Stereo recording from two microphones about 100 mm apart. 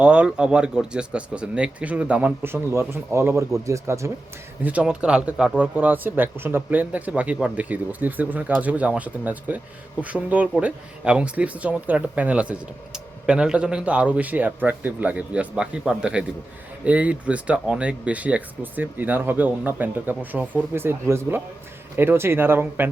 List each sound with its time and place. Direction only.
0.0 s speech: 10° right (ahead or behind); by 4.1 s 30° right (ahead or behind)
4.6 s speech: 15° right (ahead or behind)